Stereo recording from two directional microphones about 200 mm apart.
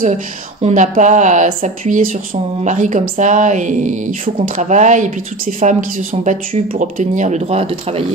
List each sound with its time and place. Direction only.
0.6 s speech: 35° right (ahead or behind)